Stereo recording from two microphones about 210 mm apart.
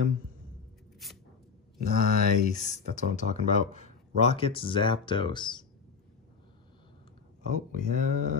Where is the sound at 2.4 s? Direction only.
35° left (ahead or behind).